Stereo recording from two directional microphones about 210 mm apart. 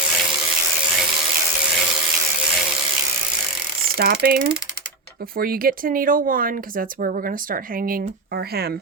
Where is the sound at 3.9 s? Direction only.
45° right (ahead or behind).